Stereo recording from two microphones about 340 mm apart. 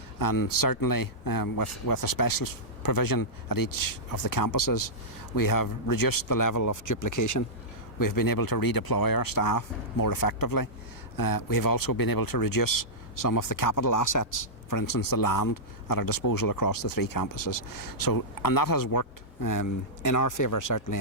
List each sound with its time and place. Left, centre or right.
0.2 s speech: left